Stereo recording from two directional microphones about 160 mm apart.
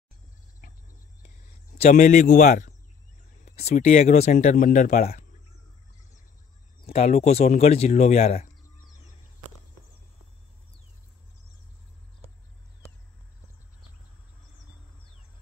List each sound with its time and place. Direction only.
0.6 s cricket: 55° left (ahead or behind)
1.8 s a man's voice: 50° left (ahead or behind)
6.9 s speech: 45° left (ahead or behind)